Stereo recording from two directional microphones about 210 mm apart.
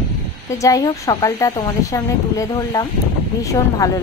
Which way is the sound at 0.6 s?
15° left (ahead or behind).